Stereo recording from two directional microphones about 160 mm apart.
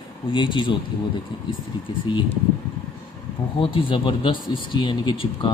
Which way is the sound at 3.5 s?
30° left (ahead or behind).